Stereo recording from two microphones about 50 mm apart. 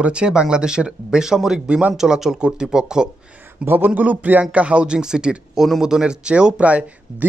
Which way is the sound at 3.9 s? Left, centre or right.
Right.